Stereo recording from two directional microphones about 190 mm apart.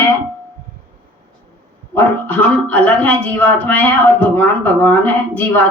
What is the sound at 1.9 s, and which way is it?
Speech, 10° left (ahead or behind).